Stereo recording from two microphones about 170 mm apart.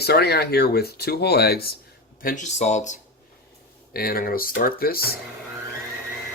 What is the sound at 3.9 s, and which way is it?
Speech, 60° left (ahead or behind).